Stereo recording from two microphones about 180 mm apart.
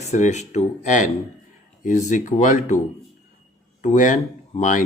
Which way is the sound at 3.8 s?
45° left (ahead or behind).